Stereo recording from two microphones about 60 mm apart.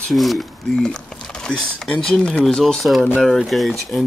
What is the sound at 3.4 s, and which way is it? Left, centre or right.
Speech, centre.